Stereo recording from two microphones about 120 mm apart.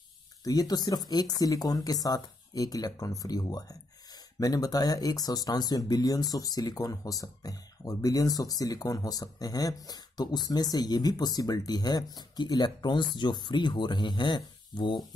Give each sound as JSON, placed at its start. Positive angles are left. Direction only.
{"t": 0.4, "sound": "speech", "side_deg": 35}